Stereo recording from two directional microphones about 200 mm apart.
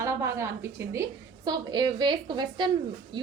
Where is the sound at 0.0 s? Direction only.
15° right (ahead or behind).